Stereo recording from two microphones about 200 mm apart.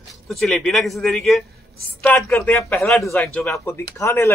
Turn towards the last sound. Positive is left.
turn(degrees=10)  # may be behind; listen again after turning